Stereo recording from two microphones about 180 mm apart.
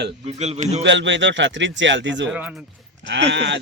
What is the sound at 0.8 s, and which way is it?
A man's voice, 85° right.